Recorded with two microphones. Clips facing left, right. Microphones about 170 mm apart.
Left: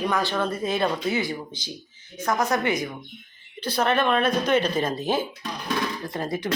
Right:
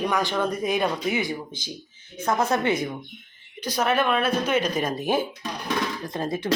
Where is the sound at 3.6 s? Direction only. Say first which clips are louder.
Even; 10° right (ahead or behind).